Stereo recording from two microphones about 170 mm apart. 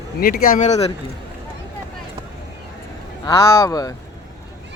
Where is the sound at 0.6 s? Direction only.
40° left (ahead or behind).